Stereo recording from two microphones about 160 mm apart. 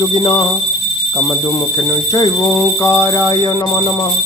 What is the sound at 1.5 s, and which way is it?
Speech, 20° left (ahead or behind).